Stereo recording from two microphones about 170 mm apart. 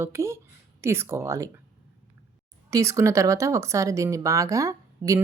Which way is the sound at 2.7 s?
20° right (ahead or behind).